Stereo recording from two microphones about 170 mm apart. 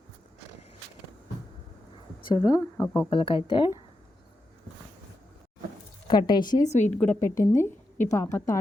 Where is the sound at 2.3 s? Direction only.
20° left (ahead or behind).